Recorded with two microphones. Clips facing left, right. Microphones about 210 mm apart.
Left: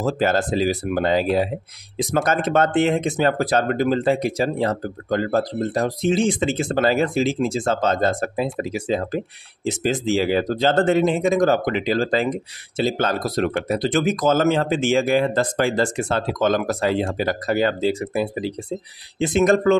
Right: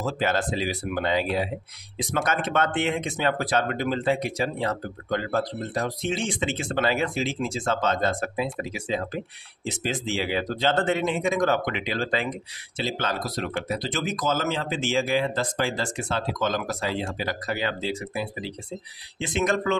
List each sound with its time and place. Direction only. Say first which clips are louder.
0.0 s speech: left 5 dB; 40° left (ahead or behind)